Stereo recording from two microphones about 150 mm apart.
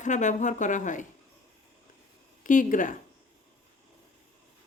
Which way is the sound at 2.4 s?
60° left (ahead or behind).